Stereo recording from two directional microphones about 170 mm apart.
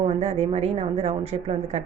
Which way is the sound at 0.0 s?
40° right (ahead or behind).